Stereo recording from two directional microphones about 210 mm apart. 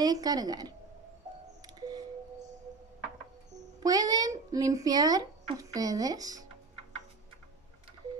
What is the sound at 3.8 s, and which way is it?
A woman's voice, 15° right (ahead or behind).